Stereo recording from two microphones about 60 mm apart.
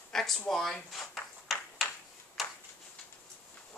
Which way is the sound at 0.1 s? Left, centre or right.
Centre.